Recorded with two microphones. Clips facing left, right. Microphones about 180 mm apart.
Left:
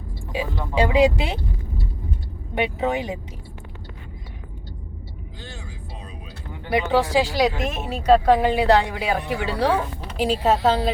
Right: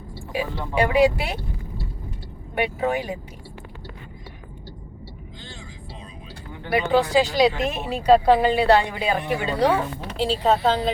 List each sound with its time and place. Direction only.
0.3 s speech: 20° left (ahead or behind)
2.6 s speech: 20° left (ahead or behind)
6.7 s speech: 15° left (ahead or behind)
8.0 s a woman's voice: 10° right (ahead or behind)
8.4 s speech: 10° left (ahead or behind)
9.7 s speech: 15° left (ahead or behind)